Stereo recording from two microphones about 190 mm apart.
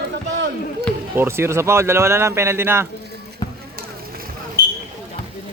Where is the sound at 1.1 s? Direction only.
10° right (ahead or behind).